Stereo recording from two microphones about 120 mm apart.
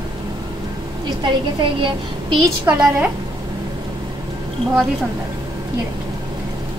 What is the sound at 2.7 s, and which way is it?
Speech, 15° right (ahead or behind).